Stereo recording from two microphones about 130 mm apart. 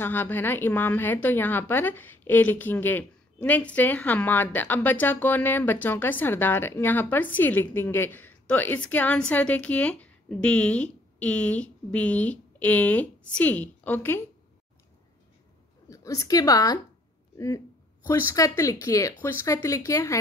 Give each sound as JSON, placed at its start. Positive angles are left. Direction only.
{"t": 0.0, "sound": "speech", "side_deg": 15}
{"t": 15.9, "sound": "a woman's voice", "side_deg": 25}
{"t": 18.0, "sound": "speech", "side_deg": 25}